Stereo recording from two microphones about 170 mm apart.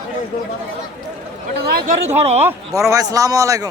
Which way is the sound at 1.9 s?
40° right (ahead or behind).